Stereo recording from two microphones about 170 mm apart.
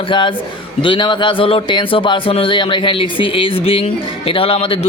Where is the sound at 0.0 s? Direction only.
30° left (ahead or behind).